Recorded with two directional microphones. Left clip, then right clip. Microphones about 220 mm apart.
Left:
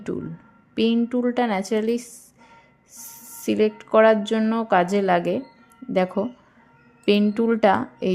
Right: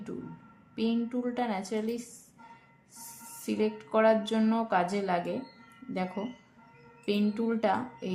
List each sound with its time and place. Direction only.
0.8 s speech: 35° left (ahead or behind)
3.4 s speech: 35° left (ahead or behind)